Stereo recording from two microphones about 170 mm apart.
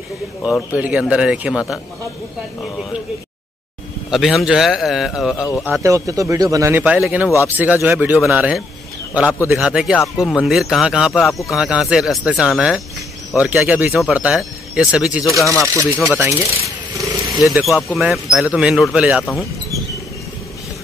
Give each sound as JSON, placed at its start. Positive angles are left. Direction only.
{"t": 0.7, "sound": "speech", "side_deg": -5}
{"t": 4.1, "sound": "speech", "side_deg": 0}
{"t": 5.7, "sound": "speech", "side_deg": -20}
{"t": 15.7, "sound": "speech", "side_deg": -15}
{"t": 17.5, "sound": "speech", "side_deg": 0}